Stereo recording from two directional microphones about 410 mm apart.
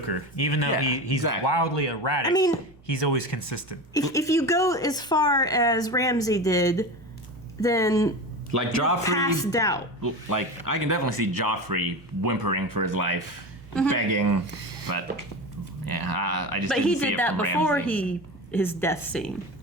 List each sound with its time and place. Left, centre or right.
0.0 s speech: left
1.5 s a man's voice: left
2.2 s speech: centre
2.8 s speech: left
3.9 s speech: centre
8.5 s speech: right
9.0 s speech: centre
10.0 s speech: right
15.9 s speech: right
16.6 s a woman's voice: centre